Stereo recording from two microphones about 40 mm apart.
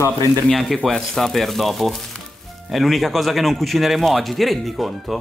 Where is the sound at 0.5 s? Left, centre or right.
Centre.